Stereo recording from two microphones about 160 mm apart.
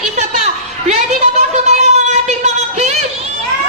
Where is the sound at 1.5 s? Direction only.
45° right (ahead or behind).